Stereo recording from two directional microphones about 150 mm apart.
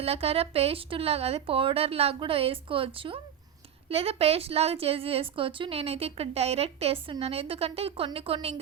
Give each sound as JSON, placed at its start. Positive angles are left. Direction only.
{"t": 0.0, "sound": "a woman's voice", "side_deg": -40}